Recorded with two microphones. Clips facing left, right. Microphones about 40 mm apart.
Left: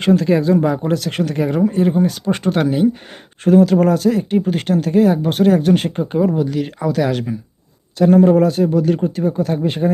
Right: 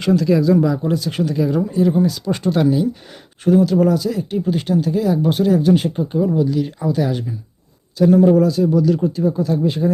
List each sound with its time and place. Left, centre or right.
0.0 s speech: left
0.8 s speech: left
7.9 s speech: left